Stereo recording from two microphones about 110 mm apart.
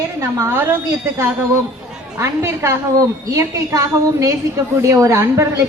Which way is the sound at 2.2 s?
25° right (ahead or behind).